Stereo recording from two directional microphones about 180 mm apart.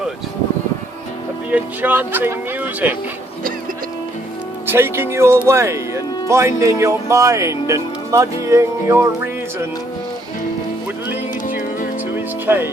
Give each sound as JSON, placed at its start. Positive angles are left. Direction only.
{"t": 1.5, "sound": "speech", "side_deg": -10}
{"t": 4.6, "sound": "speech", "side_deg": -15}
{"t": 12.1, "sound": "music", "side_deg": -10}